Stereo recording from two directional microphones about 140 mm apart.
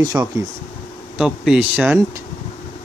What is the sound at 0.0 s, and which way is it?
Speech, 30° right (ahead or behind).